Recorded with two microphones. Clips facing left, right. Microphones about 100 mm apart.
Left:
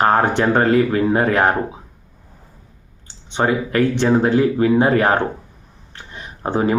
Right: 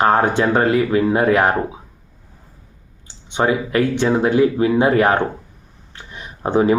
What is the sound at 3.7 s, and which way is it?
Speech, 15° right (ahead or behind).